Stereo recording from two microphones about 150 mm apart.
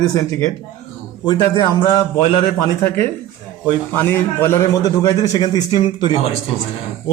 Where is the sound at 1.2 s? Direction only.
30° left (ahead or behind).